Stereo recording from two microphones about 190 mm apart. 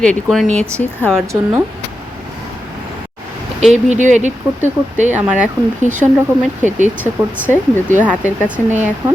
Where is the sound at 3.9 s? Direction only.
40° right (ahead or behind).